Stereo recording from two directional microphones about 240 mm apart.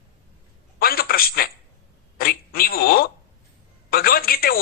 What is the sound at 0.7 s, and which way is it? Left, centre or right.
A man's voice, left.